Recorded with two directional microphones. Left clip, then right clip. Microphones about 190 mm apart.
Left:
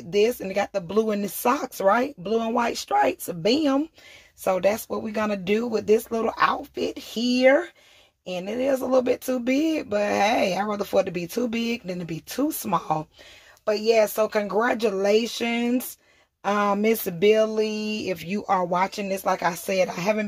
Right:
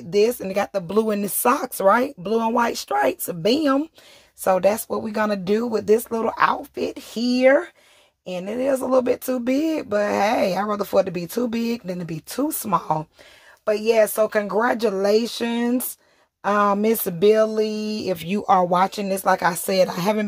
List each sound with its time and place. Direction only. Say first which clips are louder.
0.1 s speech: right 3 dB; 35° right (ahead or behind)